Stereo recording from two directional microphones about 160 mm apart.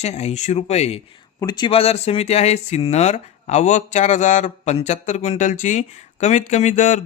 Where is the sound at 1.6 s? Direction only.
40° left (ahead or behind).